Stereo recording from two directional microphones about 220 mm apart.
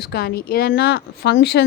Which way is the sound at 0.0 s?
45° left (ahead or behind).